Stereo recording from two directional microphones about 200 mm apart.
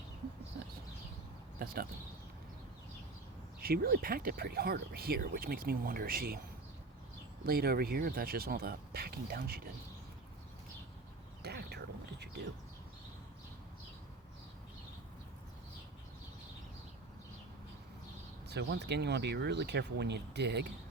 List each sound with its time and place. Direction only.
1.5 s speech: 45° right (ahead or behind)
3.6 s speech: 50° right (ahead or behind)
7.4 s speech: 50° right (ahead or behind)
11.4 s a sound: 55° right (ahead or behind)
18.4 s speech: 55° right (ahead or behind)